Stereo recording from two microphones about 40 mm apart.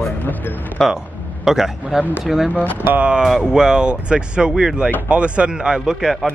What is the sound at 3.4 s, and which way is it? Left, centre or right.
Speech, centre.